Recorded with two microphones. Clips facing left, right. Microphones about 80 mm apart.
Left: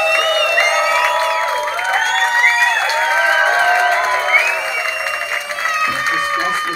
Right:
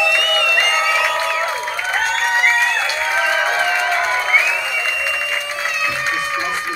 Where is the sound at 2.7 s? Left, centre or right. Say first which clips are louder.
Left 4 dB; left.